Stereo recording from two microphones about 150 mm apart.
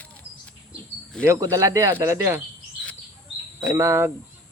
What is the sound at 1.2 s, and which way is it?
Speech, 20° right (ahead or behind).